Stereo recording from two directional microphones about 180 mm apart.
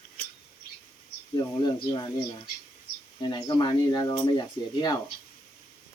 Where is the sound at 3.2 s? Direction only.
25° left (ahead or behind).